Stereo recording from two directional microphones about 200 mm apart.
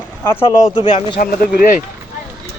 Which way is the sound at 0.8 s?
25° left (ahead or behind).